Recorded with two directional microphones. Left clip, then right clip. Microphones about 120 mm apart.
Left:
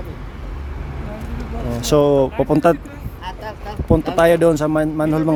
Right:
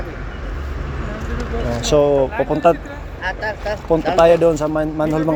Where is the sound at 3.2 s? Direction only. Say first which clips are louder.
Right 8 dB; 70° left (ahead or behind).